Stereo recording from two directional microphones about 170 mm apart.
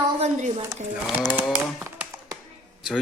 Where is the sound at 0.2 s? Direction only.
45° right (ahead or behind).